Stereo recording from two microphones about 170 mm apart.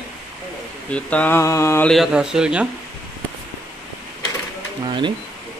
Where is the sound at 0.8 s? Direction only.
10° left (ahead or behind).